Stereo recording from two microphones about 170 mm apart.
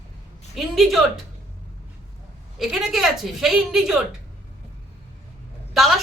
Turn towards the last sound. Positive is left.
turn(degrees=0)  # may be behind; listen again after turning